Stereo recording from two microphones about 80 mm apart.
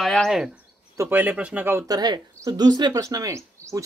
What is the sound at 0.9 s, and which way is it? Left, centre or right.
Speech, right.